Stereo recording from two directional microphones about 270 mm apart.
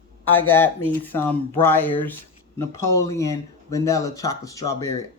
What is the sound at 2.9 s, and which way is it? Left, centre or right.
Speech, centre.